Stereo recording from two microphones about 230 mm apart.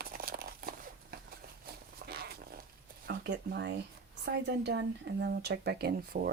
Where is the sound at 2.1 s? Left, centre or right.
Right.